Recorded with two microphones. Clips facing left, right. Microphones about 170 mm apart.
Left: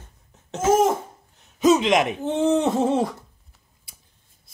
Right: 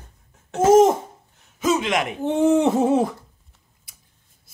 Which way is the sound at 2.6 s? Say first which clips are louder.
Right 3 dB; 5° right (ahead or behind).